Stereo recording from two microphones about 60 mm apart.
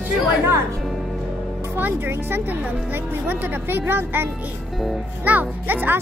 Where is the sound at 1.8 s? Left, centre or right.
Right.